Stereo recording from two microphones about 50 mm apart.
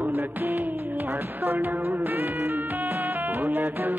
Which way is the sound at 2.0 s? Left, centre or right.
Right.